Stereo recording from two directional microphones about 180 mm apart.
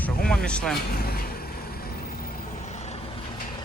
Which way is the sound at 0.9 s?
60° left (ahead or behind).